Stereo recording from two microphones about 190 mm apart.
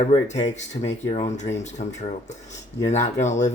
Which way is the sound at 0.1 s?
35° left (ahead or behind).